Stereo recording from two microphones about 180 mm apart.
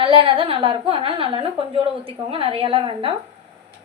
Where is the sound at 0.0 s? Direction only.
30° right (ahead or behind).